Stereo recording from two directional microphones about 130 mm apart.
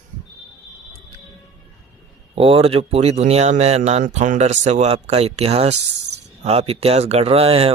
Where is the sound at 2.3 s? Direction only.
45° right (ahead or behind).